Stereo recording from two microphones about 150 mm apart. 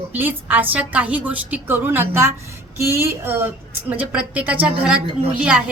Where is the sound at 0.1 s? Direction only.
10° right (ahead or behind).